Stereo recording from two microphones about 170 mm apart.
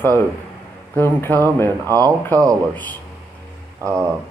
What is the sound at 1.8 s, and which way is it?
Speech, 20° right (ahead or behind).